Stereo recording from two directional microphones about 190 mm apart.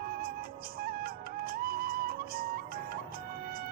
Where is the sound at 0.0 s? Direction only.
50° right (ahead or behind).